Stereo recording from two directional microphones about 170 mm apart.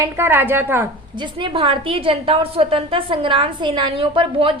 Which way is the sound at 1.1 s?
30° right (ahead or behind).